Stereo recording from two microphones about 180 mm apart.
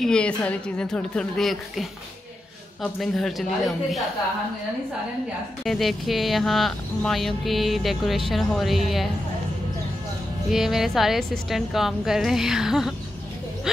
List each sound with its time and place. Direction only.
0.0 s speech: 5° left (ahead or behind)
5.6 s speech: centre (ahead or behind)
10.5 s speech: centre (ahead or behind)